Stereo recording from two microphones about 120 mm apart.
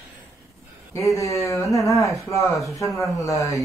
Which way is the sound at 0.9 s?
25° left (ahead or behind).